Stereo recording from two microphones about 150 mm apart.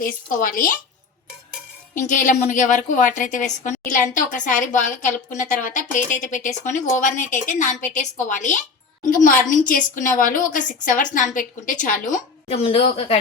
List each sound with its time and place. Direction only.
0.0 s a woman's voice: 65° left (ahead or behind)
2.0 s a woman's voice: 60° left (ahead or behind)
12.5 s a woman's voice: 40° left (ahead or behind)